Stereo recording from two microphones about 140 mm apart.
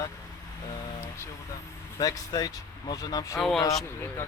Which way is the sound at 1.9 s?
25° left (ahead or behind).